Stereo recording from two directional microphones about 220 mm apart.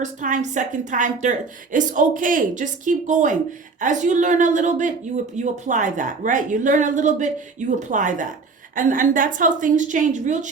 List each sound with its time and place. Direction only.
0.0 s a woman's voice: 35° right (ahead or behind)